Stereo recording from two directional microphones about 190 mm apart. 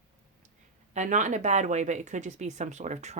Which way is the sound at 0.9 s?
40° right (ahead or behind).